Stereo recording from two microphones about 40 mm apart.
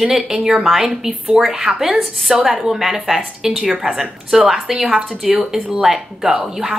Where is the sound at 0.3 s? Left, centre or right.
Centre.